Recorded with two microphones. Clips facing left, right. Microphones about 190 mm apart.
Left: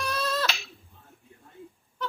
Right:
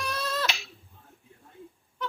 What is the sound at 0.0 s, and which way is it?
Finger snapping, 20° right (ahead or behind).